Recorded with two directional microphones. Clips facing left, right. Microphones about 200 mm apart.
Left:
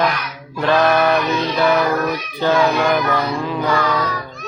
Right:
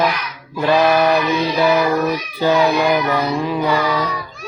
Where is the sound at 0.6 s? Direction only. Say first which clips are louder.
Right 1 dB; 10° right (ahead or behind).